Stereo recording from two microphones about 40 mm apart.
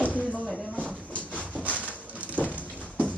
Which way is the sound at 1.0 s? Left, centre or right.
Left.